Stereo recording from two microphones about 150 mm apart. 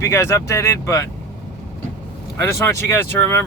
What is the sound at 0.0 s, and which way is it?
Speech, 15° left (ahead or behind).